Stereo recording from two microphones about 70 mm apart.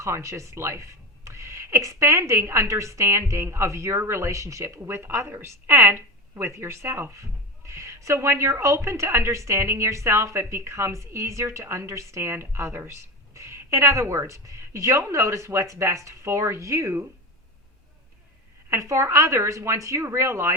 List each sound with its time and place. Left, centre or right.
0.0 s a woman's voice: right
4.8 s a woman's voice: right
18.7 s a woman's voice: right